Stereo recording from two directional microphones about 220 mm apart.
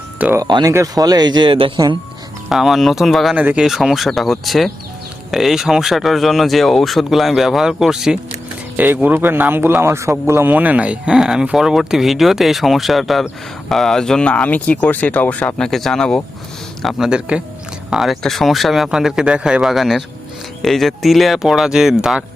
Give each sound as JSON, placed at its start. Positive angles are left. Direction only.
{"t": 0.2, "sound": "speech", "side_deg": -10}
{"t": 2.5, "sound": "speech", "side_deg": 0}